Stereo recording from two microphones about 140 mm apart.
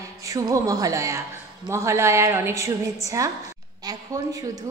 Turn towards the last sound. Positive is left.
turn(degrees=-25)  # may be behind; listen again after turning